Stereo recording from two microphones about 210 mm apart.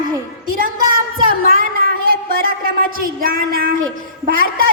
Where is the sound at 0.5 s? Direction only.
40° right (ahead or behind).